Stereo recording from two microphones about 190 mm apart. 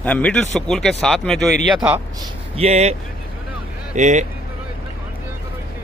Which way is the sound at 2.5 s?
35° right (ahead or behind).